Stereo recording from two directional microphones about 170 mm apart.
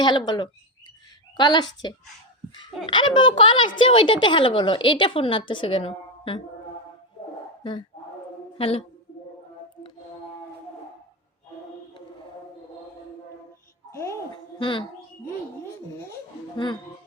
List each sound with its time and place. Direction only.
0.0 s a woman's voice: 25° left (ahead or behind)
2.8 s a woman's voice: 30° left (ahead or behind)
7.6 s a woman's voice: 25° left (ahead or behind)
13.9 s a sound: 15° left (ahead or behind)
14.6 s a woman's voice: 30° left (ahead or behind)